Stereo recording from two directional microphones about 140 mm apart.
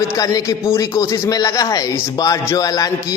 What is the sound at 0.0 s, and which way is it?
A man's voice, 25° left (ahead or behind).